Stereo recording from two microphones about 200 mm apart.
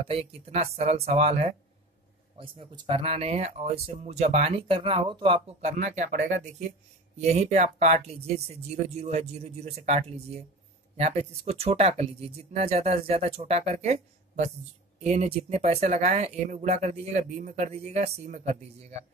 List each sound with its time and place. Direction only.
0.1 s speech: 30° right (ahead or behind)
15.0 s speech: 35° right (ahead or behind)